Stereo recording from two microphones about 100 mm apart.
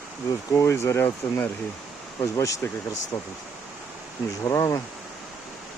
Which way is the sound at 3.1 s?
20° left (ahead or behind).